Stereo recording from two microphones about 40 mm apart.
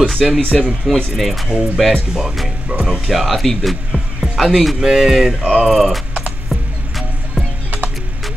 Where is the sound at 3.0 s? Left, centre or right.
Centre.